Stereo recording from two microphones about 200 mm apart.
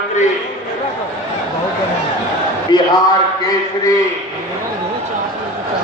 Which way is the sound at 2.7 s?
20° left (ahead or behind).